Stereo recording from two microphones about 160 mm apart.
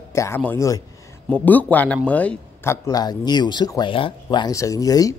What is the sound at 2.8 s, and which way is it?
A man's voice, 25° left (ahead or behind).